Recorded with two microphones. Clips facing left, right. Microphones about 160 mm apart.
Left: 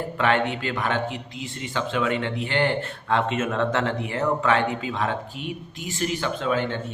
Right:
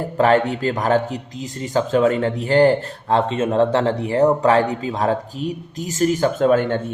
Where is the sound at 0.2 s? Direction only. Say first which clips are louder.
Right 7 dB; 40° right (ahead or behind).